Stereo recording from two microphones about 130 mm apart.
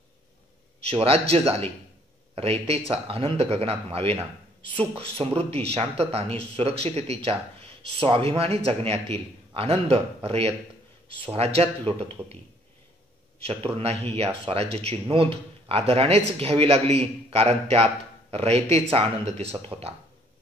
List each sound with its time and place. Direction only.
0.8 s speech: 50° right (ahead or behind)
13.4 s speech: 50° right (ahead or behind)